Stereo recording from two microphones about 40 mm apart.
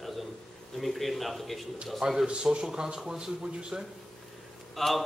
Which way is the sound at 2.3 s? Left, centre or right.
Right.